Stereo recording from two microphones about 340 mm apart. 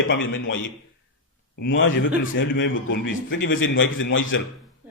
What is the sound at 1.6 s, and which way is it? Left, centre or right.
A man's voice, left.